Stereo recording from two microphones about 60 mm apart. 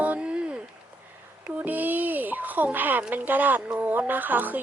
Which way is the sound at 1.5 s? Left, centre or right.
Right.